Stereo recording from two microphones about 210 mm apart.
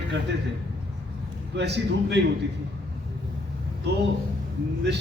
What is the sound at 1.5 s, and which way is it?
Speech, 55° right (ahead or behind).